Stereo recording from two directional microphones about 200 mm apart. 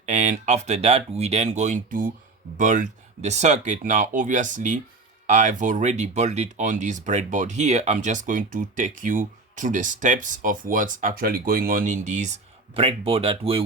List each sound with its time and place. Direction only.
0.0 s speech: 35° right (ahead or behind)